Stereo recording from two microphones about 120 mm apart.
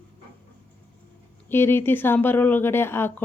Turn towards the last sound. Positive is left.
turn(degrees=20)  # may be behind; listen again after turning